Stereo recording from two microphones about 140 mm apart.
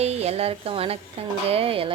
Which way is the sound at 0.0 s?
50° right (ahead or behind).